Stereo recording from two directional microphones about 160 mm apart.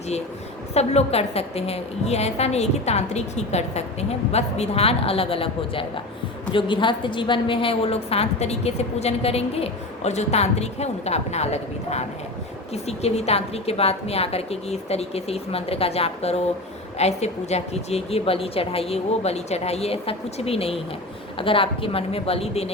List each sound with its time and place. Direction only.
0.7 s a woman's voice: 40° left (ahead or behind)